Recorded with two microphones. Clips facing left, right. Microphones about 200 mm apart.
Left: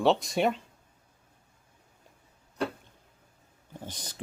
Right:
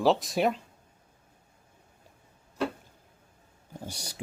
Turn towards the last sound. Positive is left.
turn(degrees=-10)  # may be behind; listen again after turning